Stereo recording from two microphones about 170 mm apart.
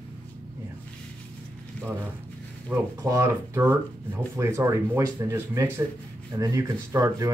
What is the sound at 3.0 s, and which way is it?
Speech, 15° right (ahead or behind).